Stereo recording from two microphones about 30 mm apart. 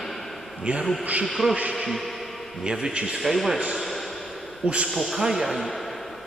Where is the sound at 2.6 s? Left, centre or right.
Right.